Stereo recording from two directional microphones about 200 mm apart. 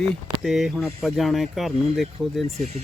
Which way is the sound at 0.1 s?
Centre (ahead or behind).